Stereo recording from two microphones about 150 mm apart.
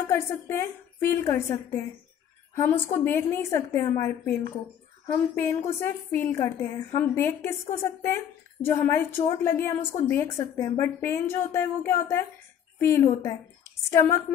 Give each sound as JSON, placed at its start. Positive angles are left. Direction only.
{"t": 0.1, "sound": "a woman's voice", "side_deg": 15}